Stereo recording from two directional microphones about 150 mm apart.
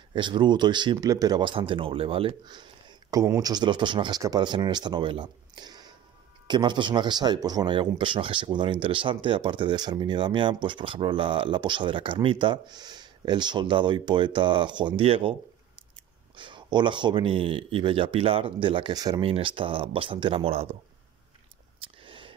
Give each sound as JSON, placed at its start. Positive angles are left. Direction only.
{"t": 0.1, "sound": "speech", "side_deg": -30}
{"t": 16.3, "sound": "speech", "side_deg": -30}
{"t": 21.8, "sound": "a sound", "side_deg": -35}